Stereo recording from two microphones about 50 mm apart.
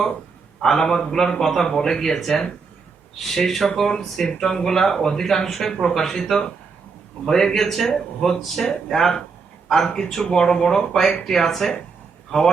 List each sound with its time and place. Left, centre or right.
0.6 s speech: centre